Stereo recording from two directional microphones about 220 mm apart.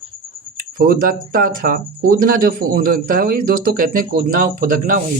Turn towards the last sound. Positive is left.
turn(degrees=-40)  # may be behind; listen again after turning